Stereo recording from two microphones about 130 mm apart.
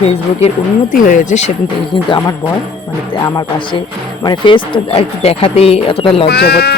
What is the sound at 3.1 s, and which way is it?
Speech, 40° left (ahead or behind).